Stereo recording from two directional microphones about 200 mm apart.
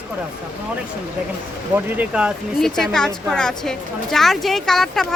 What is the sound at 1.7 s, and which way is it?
A woman's voice, 10° right (ahead or behind).